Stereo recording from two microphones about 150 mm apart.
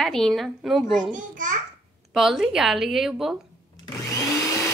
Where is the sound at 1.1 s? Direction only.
60° right (ahead or behind).